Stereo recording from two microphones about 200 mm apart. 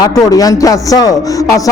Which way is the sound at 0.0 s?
20° left (ahead or behind).